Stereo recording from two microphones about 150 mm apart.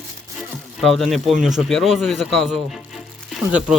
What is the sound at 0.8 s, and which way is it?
Speech, centre (ahead or behind).